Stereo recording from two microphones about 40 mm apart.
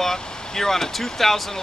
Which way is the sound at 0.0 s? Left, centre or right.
Centre.